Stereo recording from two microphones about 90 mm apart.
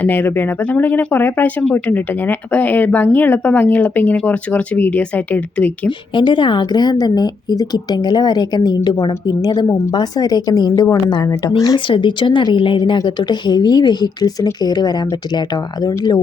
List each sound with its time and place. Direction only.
0.0 s speech: 20° left (ahead or behind)
6.1 s a woman's voice: 60° left (ahead or behind)
9.6 s a woman's voice: 35° left (ahead or behind)
9.9 s a woman's voice: 45° left (ahead or behind)
11.9 s a woman's voice: 65° left (ahead or behind); by 16.2 s 50° left (ahead or behind)